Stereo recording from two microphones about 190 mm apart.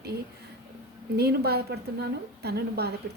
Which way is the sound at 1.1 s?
60° right (ahead or behind).